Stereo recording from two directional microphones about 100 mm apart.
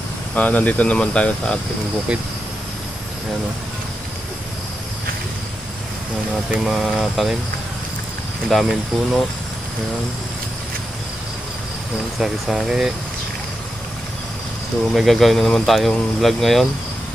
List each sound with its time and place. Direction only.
0.3 s speech: 15° left (ahead or behind)
6.5 s speech: 5° right (ahead or behind)
8.5 s speech: centre (ahead or behind)
12.2 s speech: 5° right (ahead or behind)
14.9 s speech: centre (ahead or behind)